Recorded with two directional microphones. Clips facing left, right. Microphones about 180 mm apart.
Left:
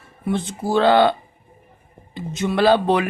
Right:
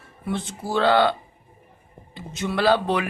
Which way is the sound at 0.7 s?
20° left (ahead or behind).